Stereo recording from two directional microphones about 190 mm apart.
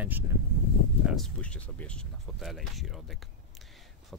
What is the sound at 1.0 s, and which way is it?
Speech, 5° left (ahead or behind).